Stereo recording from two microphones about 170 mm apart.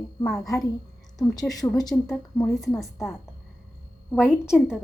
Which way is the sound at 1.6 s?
20° left (ahead or behind).